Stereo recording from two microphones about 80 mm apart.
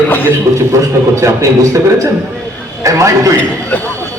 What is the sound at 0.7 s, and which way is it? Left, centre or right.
A man's voice, right.